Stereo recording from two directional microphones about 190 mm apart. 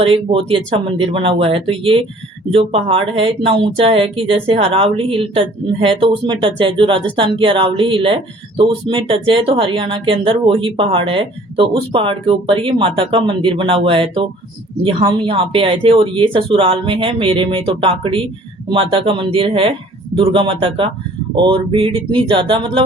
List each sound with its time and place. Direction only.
0.0 s speech: 30° right (ahead or behind)